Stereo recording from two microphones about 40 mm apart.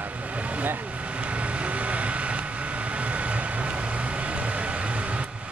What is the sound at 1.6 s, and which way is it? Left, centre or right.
Vehicle, right.